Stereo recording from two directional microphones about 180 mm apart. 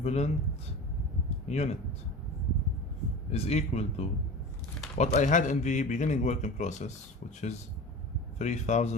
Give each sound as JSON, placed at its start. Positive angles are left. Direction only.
{"t": 0.0, "sound": "speech", "side_deg": 35}
{"t": 1.5, "sound": "speech", "side_deg": 40}
{"t": 3.3, "sound": "a man's voice", "side_deg": 35}